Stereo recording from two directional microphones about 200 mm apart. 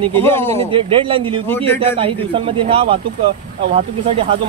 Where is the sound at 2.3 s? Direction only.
25° right (ahead or behind).